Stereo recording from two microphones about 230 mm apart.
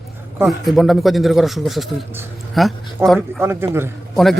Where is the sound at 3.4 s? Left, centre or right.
Centre.